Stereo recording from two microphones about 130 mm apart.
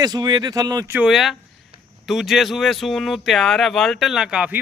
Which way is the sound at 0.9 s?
10° right (ahead or behind).